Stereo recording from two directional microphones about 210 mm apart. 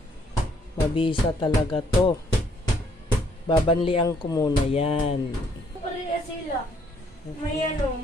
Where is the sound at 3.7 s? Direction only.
25° left (ahead or behind).